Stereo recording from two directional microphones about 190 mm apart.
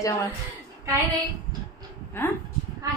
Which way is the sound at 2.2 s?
10° left (ahead or behind).